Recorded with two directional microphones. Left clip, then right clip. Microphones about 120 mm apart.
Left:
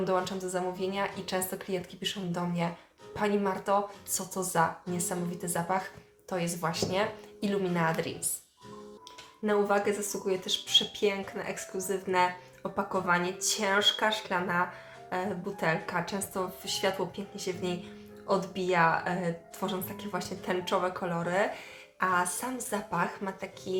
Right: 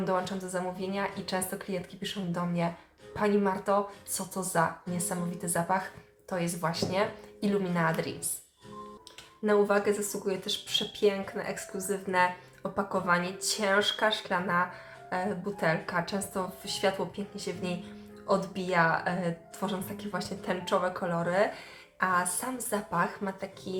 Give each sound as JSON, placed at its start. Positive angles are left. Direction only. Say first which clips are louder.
{"t": 0.0, "sound": "speech", "louder": "left 1 dB", "side_deg": 15}
{"t": 9.4, "sound": "speech", "louder": "right 2 dB", "side_deg": 10}